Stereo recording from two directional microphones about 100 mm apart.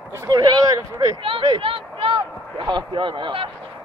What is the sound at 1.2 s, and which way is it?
A man's voice, 55° right (ahead or behind).